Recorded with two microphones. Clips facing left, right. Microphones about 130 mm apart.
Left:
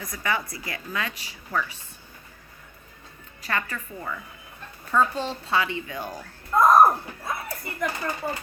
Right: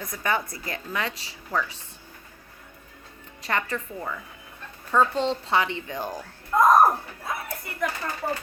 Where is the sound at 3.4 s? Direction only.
25° right (ahead or behind).